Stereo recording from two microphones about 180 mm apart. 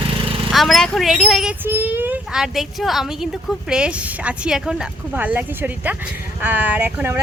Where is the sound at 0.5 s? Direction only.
Centre (ahead or behind).